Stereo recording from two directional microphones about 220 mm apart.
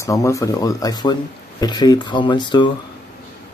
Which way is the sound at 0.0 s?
15° left (ahead or behind).